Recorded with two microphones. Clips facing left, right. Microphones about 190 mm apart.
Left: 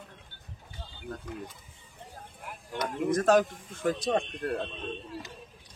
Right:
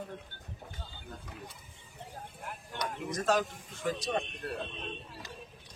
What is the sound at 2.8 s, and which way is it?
A man's voice, 55° left (ahead or behind).